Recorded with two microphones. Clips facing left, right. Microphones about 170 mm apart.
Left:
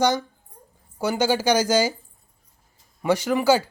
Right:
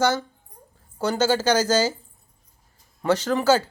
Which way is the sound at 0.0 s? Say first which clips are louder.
Left 1 dB; 15° left (ahead or behind).